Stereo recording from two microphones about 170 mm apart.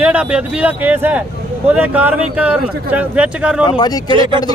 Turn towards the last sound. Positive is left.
turn(degrees=25)  # may be behind; listen again after turning